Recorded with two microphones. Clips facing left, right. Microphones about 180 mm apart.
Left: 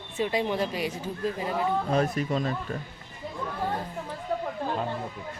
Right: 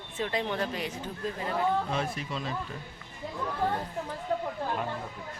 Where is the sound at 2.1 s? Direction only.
45° left (ahead or behind).